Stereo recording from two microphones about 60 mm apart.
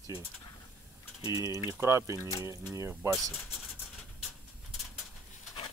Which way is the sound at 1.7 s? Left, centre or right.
Right.